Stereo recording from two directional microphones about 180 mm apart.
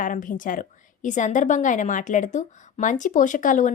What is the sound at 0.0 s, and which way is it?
A woman's voice, 50° left (ahead or behind).